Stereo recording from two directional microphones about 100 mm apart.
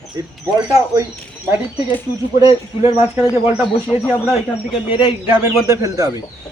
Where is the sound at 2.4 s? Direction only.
35° right (ahead or behind).